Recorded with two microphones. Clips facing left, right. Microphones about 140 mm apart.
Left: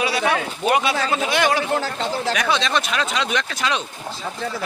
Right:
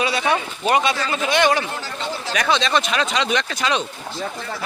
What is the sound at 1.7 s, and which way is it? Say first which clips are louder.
Speech: left 6 dB; 90° left.